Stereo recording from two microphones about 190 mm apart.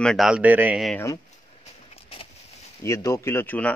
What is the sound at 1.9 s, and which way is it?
Vehicle, 30° left (ahead or behind).